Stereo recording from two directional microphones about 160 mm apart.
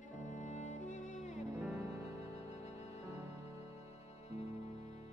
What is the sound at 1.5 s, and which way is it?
Music, 5° right (ahead or behind).